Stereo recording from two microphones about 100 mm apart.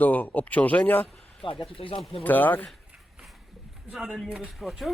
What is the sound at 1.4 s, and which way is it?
Speech, 60° left (ahead or behind).